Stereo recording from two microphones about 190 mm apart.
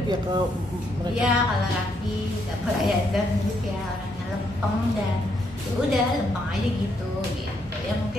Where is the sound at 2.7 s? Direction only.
Centre (ahead or behind).